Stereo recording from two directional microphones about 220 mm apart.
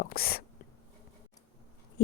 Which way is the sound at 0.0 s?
45° left (ahead or behind).